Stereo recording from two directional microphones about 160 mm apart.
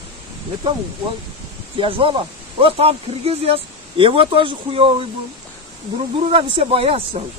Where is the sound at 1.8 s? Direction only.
35° right (ahead or behind).